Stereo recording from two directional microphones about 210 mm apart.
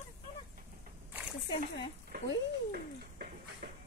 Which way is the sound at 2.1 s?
45° right (ahead or behind).